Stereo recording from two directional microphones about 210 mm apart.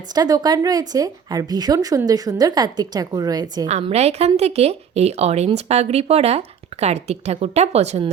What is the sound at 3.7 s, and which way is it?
A woman's voice, 30° right (ahead or behind).